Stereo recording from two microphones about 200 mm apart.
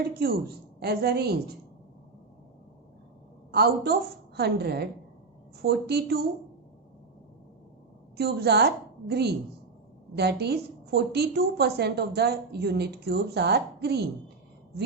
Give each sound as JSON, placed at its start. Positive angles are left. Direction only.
{"t": 0.0, "sound": "a woman's voice", "side_deg": -50}
{"t": 3.5, "sound": "a woman's voice", "side_deg": -50}
{"t": 8.1, "sound": "a woman's voice", "side_deg": -55}